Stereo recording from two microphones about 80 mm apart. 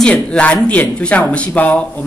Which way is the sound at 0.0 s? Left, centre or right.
Centre.